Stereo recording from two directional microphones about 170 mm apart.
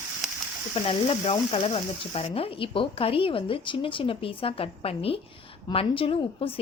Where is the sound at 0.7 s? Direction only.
35° left (ahead or behind).